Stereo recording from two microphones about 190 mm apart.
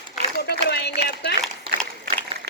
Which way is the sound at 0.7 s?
60° left (ahead or behind).